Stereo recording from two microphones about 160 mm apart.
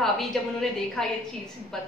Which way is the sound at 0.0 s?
Centre (ahead or behind).